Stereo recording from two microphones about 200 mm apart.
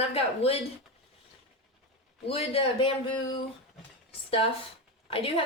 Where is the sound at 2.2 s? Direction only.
30° left (ahead or behind).